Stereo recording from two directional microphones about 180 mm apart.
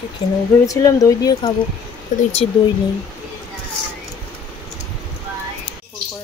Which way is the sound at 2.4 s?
35° left (ahead or behind).